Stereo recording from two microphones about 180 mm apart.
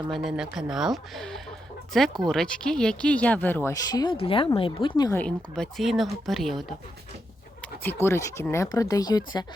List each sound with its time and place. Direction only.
0.1 s speech: centre (ahead or behind); by 5.1 s 25° left (ahead or behind)
5.1 s speech: 5° left (ahead or behind)
8.0 s speech: 15° left (ahead or behind)